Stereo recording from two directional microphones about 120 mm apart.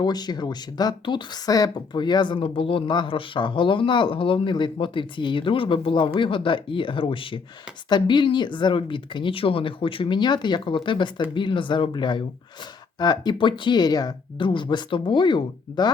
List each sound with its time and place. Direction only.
0.0 s speech: 35° left (ahead or behind)